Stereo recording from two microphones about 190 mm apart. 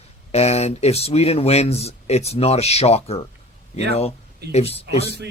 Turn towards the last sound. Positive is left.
turn(degrees=30)  # may be behind; listen again after turning